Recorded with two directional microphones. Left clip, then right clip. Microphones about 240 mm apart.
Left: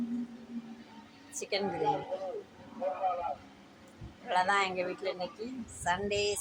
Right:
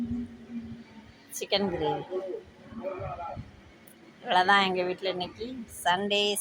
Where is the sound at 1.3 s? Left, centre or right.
Right.